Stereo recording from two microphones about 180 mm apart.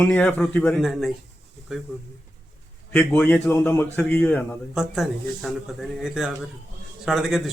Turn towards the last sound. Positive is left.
turn(degrees=0)  # may be behind; listen again after turning